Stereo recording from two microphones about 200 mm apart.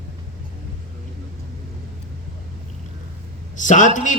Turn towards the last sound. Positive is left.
turn(degrees=40)  # may be behind; listen again after turning